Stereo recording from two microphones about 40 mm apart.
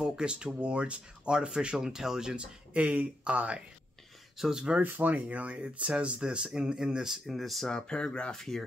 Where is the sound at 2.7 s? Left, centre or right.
Right.